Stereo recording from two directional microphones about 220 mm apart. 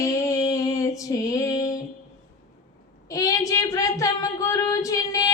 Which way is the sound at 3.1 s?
15° left (ahead or behind).